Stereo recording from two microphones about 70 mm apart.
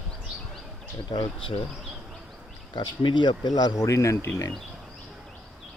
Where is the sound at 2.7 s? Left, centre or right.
Left.